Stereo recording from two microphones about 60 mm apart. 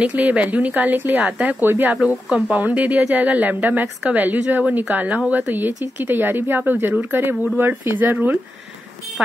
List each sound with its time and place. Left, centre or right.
0.0 s speech: right
2.2 s speech: centre
2.5 s speech: right